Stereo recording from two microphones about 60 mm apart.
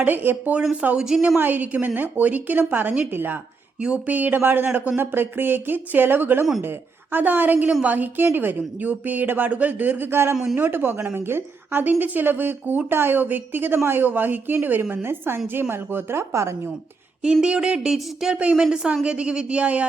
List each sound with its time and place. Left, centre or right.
0.0 s a woman's voice: right
1.0 s a sound: centre
1.4 s a man's voice: right
3.8 s a sound: centre
4.0 s a woman's voice: right
7.7 s a man's voice: centre
7.9 s a woman's voice: right
16.3 s speech: right
17.4 s a sound: centre
19.0 s a man's voice: centre